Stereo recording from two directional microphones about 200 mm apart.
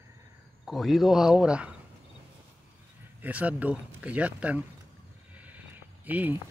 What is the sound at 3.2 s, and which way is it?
Speech, 5° right (ahead or behind).